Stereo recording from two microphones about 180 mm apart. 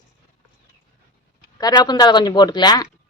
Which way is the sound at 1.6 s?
20° left (ahead or behind).